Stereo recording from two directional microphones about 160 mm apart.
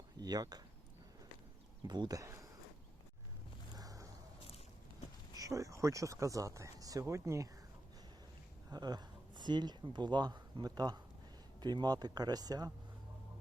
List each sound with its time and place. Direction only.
0.2 s speech: 25° right (ahead or behind)
1.9 s speech: 25° right (ahead or behind)
3.8 s a sound: 20° right (ahead or behind)
5.3 s speech: 20° right (ahead or behind)
8.7 s speech: 25° right (ahead or behind)